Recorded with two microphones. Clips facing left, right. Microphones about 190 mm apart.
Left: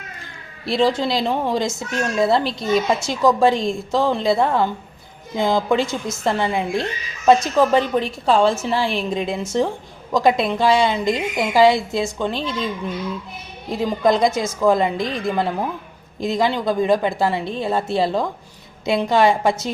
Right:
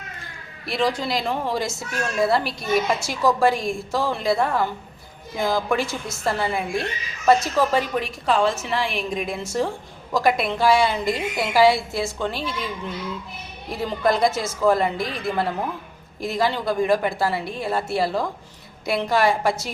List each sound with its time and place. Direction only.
0.6 s a woman's voice: 25° left (ahead or behind)
13.7 s a woman's voice: 20° left (ahead or behind)